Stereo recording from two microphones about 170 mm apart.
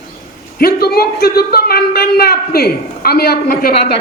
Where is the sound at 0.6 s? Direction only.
65° left (ahead or behind).